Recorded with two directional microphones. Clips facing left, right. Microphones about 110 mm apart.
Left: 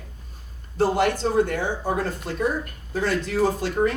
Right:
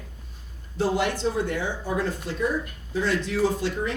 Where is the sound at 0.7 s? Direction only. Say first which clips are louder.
Left 4 dB; 50° left (ahead or behind).